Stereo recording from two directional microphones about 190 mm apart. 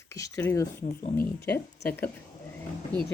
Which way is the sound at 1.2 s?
55° left (ahead or behind).